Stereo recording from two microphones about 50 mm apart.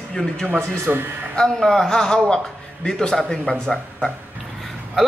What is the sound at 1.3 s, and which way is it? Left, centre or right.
A woman's voice, centre.